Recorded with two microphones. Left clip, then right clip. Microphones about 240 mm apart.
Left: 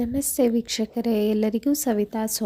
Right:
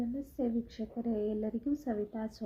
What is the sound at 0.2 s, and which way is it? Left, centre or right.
A woman's voice, left.